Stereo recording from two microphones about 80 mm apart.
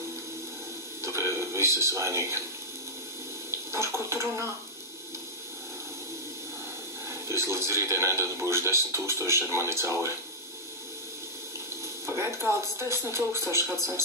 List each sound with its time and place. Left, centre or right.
1.0 s television: right
3.7 s speech: right
7.1 s speech: right
12.1 s speech: right